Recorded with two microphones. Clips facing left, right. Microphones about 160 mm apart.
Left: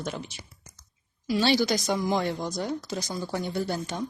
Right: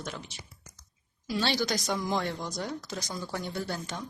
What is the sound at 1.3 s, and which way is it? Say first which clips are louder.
Speech: left 6 dB; 5° left (ahead or behind).